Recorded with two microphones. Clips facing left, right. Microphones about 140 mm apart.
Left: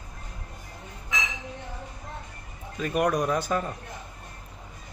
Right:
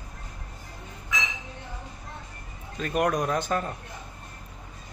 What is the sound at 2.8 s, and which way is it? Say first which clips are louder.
Speech: left 1 dB; 10° left (ahead or behind).